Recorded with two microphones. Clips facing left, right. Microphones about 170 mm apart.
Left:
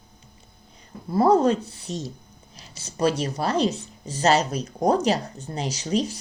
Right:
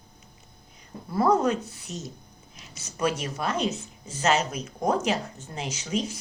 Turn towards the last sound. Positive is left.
turn(degrees=35)  # may be behind; listen again after turning